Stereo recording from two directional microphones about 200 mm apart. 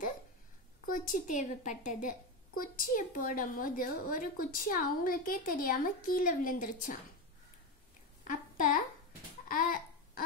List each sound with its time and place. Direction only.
0.8 s a woman's voice: 40° left (ahead or behind)
8.2 s a sound: 40° left (ahead or behind)
9.5 s babbling: 45° left (ahead or behind)